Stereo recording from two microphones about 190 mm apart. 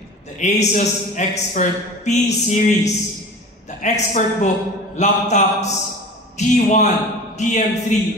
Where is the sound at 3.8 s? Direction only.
40° left (ahead or behind).